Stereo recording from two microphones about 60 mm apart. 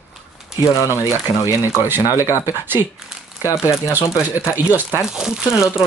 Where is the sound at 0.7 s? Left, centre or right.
Left.